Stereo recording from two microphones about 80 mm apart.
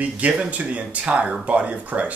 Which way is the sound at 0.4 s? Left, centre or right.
Centre.